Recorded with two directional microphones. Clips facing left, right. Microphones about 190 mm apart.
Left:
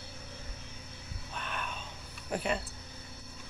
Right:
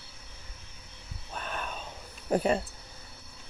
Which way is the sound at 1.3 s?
40° right (ahead or behind).